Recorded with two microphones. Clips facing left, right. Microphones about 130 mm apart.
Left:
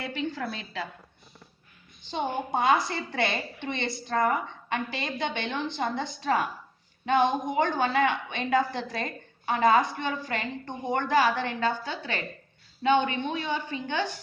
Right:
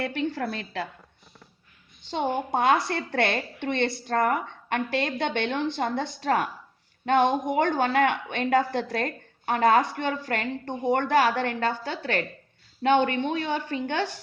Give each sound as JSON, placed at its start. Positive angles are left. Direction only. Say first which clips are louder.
{"t": 0.0, "sound": "a woman's voice", "louder": "right 4 dB", "side_deg": -60}
{"t": 2.0, "sound": "a woman's voice", "louder": "right 3 dB", "side_deg": -75}